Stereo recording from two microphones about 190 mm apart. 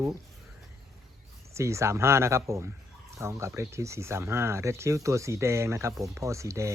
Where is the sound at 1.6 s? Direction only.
15° right (ahead or behind).